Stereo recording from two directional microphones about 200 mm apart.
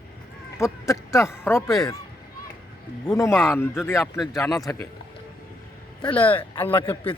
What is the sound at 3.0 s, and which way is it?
Speech, 15° left (ahead or behind).